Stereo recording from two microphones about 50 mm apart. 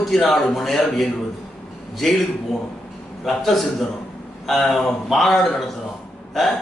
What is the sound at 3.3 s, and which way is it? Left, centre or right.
A man's voice, centre.